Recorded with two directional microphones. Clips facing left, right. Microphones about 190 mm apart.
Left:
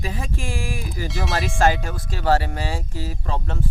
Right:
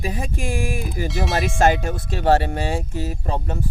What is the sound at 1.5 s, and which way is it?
Speech, 20° right (ahead or behind).